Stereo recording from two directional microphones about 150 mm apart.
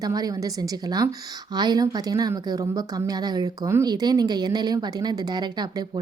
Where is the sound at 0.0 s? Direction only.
25° right (ahead or behind).